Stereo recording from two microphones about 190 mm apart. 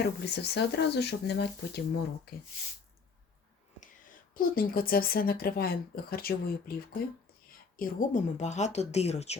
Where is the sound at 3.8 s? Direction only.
45° left (ahead or behind).